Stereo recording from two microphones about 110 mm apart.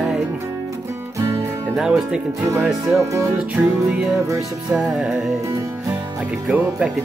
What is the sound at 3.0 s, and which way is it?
Music, 30° right (ahead or behind).